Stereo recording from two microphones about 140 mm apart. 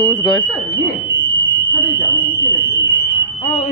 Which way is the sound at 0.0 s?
25° left (ahead or behind).